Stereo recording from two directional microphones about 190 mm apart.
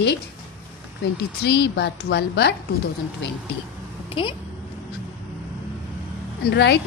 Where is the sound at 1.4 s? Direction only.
60° left (ahead or behind).